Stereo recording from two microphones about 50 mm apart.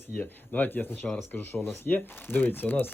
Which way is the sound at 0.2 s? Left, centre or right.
Left.